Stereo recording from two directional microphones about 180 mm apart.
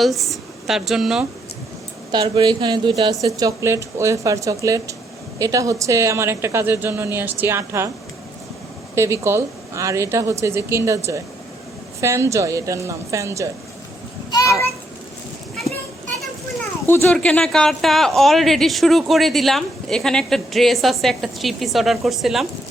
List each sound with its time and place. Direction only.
0.0 s speech: centre (ahead or behind)
2.1 s a woman's voice: 25° right (ahead or behind)
9.0 s a woman's voice: 15° right (ahead or behind)
14.3 s a sound: 20° left (ahead or behind)
16.9 s speech: 10° left (ahead or behind)